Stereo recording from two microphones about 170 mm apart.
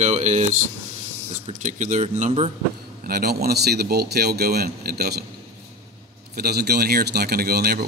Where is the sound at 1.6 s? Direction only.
45° right (ahead or behind).